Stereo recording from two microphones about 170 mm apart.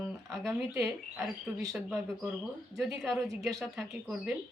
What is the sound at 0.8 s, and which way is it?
Speech, centre (ahead or behind).